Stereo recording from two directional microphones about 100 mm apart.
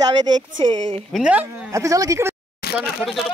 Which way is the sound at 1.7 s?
35° right (ahead or behind).